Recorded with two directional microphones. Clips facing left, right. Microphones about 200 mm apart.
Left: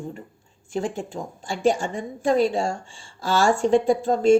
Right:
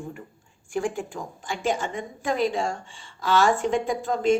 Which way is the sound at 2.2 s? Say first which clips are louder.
Left 5 dB; 30° left (ahead or behind).